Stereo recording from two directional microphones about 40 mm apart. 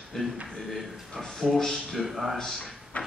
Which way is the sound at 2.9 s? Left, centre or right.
Left.